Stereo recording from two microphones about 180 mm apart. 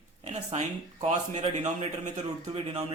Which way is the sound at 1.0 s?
40° right (ahead or behind).